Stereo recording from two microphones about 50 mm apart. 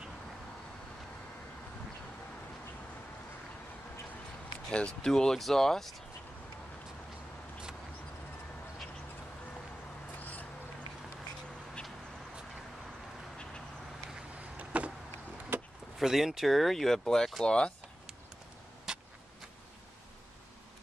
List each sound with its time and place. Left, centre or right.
4.6 s speech: centre
10.1 s a sound: left
14.6 s vehicle: right
15.5 s vehicle: right
16.0 s speech: centre
18.9 s a sound: centre